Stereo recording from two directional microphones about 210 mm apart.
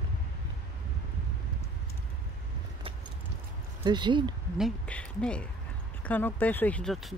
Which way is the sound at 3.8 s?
20° right (ahead or behind).